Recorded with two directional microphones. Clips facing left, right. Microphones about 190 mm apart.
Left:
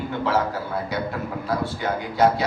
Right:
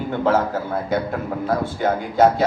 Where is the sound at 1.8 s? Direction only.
50° right (ahead or behind).